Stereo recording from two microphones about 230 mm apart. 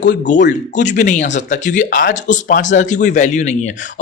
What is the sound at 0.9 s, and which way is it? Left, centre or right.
Speech, left.